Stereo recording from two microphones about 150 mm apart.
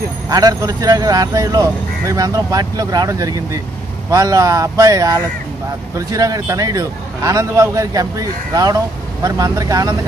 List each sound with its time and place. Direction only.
0.3 s a man's voice: 25° right (ahead or behind)